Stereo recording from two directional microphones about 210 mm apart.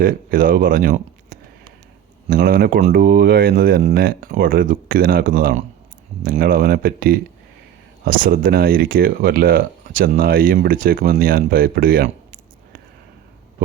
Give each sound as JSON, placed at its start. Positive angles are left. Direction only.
{"t": 0.0, "sound": "speech", "side_deg": -40}